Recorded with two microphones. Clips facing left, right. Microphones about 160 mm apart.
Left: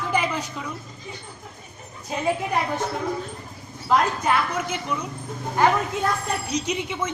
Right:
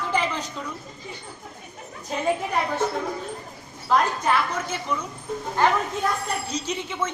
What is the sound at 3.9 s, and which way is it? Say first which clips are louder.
A woman's voice: left 1 dB; 10° left (ahead or behind).